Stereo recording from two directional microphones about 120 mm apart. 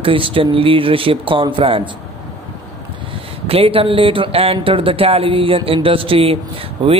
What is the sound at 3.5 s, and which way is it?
Speech, 50° right (ahead or behind).